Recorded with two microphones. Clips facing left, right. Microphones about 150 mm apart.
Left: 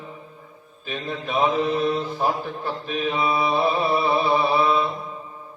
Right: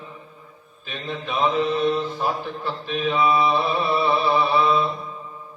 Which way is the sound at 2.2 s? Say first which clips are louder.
Left 1 dB; 45° left (ahead or behind).